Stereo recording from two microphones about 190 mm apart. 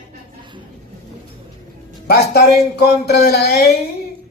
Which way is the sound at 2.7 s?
55° left (ahead or behind).